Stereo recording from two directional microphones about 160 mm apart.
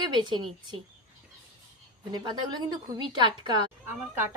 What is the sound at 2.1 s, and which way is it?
Speech, 25° right (ahead or behind).